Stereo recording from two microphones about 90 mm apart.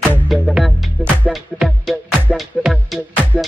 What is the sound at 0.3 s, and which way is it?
Music, centre (ahead or behind).